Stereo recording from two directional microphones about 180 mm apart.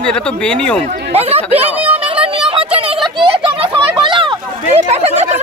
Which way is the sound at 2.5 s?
30° right (ahead or behind).